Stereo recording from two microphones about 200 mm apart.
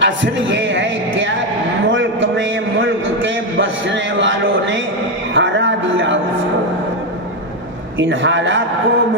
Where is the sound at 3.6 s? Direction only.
65° right (ahead or behind).